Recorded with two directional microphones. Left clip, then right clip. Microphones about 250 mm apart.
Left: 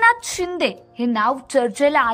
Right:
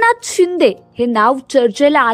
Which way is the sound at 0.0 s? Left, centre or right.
Centre.